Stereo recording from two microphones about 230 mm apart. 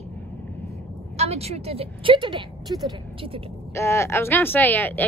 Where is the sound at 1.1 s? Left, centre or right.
Right.